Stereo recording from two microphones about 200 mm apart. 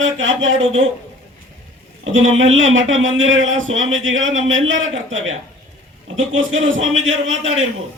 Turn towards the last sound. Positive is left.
turn(degrees=-75)  # may be behind; listen again after turning